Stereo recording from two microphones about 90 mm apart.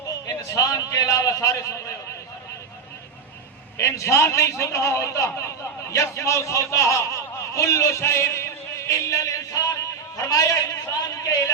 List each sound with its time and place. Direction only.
0.3 s a man's voice: 40° left (ahead or behind)
3.8 s a man's voice: 30° left (ahead or behind)